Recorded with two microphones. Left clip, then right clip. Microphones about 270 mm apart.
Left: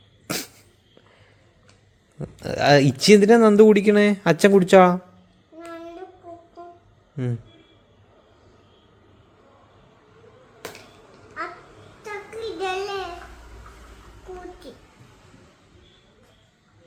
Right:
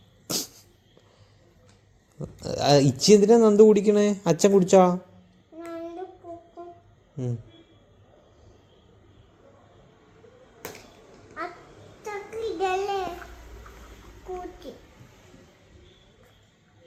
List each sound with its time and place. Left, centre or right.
0.3 s cough: left
2.1 s speech: left
12.0 s child singing: centre